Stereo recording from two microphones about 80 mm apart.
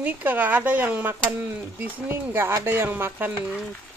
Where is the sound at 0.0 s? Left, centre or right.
Right.